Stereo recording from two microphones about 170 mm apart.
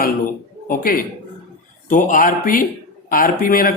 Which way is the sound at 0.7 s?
55° left (ahead or behind).